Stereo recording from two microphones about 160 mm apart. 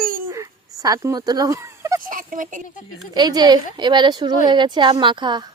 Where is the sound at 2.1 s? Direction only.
55° right (ahead or behind).